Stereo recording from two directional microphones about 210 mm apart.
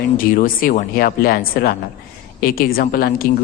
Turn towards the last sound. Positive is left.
turn(degrees=45)  # may be behind; listen again after turning